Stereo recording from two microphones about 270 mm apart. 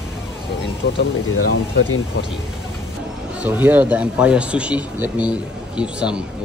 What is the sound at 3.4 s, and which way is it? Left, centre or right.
Speech, centre.